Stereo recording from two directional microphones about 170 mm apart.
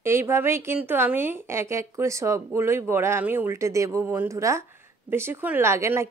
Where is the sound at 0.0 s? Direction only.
15° right (ahead or behind).